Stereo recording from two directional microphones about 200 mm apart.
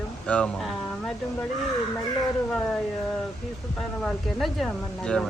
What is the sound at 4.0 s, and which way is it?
Speech, centre (ahead or behind).